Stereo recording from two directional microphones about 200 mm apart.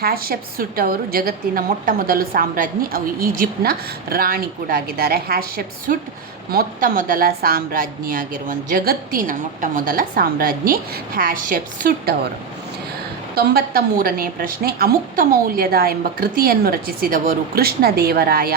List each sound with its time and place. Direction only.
0.0 s a woman's voice: 50° right (ahead or behind)
13.3 s a woman's voice: 50° right (ahead or behind)